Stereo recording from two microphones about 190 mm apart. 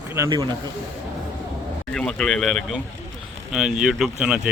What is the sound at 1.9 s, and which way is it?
Speech, 5° left (ahead or behind).